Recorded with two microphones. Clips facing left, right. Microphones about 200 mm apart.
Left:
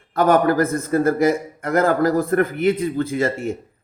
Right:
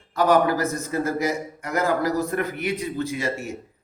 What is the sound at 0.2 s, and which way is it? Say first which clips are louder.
A man's voice: left 3 dB; 50° left (ahead or behind).